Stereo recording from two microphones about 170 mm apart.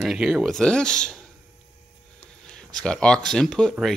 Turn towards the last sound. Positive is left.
turn(degrees=0)  # may be behind; listen again after turning